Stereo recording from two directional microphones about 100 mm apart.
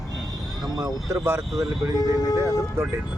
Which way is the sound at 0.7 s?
40° right (ahead or behind).